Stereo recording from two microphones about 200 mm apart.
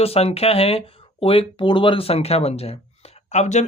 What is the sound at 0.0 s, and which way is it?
Speech, 30° left (ahead or behind).